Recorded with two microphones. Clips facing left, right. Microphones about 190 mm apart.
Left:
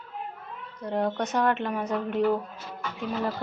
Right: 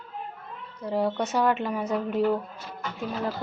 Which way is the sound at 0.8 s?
5° right (ahead or behind).